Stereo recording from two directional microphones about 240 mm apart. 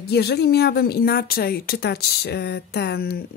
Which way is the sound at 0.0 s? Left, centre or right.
Left.